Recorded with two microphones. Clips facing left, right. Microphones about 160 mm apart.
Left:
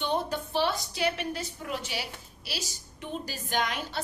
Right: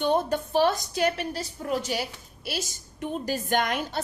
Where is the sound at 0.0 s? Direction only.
45° right (ahead or behind).